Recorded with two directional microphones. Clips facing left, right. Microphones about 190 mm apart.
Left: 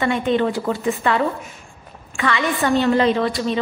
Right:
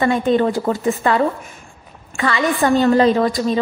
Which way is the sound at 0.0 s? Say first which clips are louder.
Right 3 dB; 40° right (ahead or behind).